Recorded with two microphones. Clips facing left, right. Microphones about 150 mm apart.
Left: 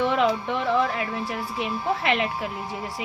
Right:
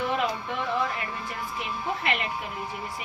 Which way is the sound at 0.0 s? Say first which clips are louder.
Left 6 dB; 80° left.